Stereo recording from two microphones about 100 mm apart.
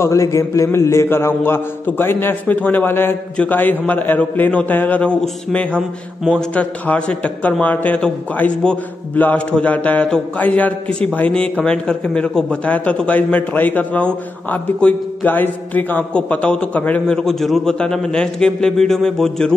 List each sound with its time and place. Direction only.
0.0 s a man's voice: 30° left (ahead or behind); by 5.8 s 10° left (ahead or behind)
5.8 s a man's voice: centre (ahead or behind)
6.5 s a man's voice: 15° left (ahead or behind)
17.2 s a man's voice: 5° left (ahead or behind)